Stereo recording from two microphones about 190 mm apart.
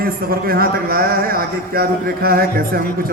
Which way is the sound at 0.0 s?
50° right (ahead or behind).